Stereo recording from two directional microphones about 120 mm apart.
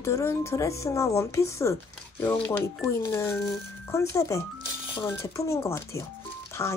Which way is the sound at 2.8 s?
25° left (ahead or behind).